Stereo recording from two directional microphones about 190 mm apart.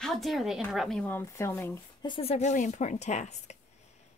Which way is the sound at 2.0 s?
30° left (ahead or behind).